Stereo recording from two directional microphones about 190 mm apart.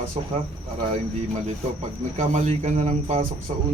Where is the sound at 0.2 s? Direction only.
35° right (ahead or behind).